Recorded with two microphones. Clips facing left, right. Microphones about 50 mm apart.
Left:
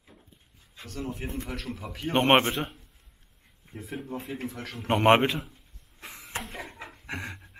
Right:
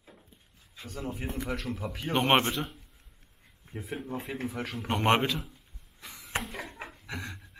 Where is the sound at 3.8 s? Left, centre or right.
Centre.